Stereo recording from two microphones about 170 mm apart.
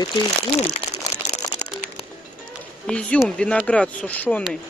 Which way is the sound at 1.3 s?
40° left (ahead or behind).